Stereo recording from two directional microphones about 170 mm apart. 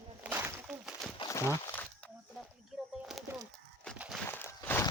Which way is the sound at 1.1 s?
20° left (ahead or behind).